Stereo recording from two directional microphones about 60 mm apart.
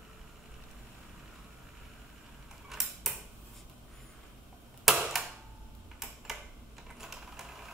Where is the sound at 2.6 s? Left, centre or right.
Centre.